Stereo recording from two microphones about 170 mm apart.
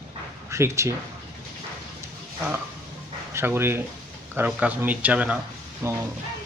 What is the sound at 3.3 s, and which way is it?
Speech, 15° right (ahead or behind).